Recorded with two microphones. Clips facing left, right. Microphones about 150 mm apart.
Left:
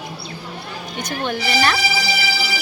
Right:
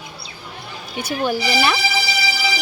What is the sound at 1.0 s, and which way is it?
Speech, 10° right (ahead or behind).